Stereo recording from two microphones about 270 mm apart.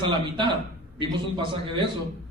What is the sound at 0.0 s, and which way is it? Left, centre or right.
A man's voice, centre.